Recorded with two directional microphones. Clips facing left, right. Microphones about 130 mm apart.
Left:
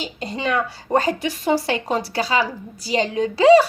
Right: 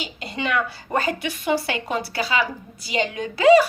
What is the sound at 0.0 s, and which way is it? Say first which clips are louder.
A woman's voice: left 3 dB; 40° left (ahead or behind).